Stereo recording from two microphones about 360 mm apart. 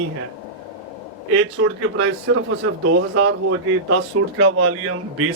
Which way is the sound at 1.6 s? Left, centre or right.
Right.